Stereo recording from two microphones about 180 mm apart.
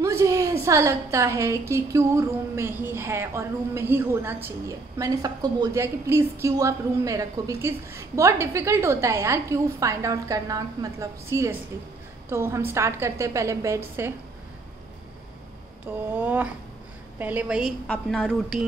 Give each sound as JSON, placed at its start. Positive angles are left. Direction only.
{"t": 0.0, "sound": "a woman's voice", "side_deg": -15}
{"t": 16.1, "sound": "a woman's voice", "side_deg": -10}